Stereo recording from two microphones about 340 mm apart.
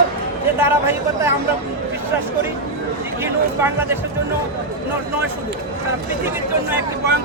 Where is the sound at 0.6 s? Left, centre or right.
Centre.